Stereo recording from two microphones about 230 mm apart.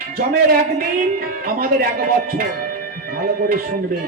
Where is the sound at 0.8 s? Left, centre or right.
Right.